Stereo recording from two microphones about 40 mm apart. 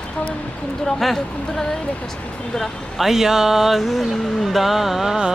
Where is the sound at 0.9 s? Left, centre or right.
Centre.